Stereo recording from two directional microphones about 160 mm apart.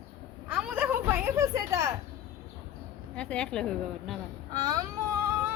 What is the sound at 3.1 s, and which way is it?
A woman's voice, 5° left (ahead or behind).